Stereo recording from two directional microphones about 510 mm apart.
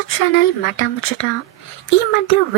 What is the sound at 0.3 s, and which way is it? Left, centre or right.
Speech, left.